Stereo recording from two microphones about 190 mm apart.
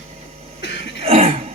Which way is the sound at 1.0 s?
30° right (ahead or behind).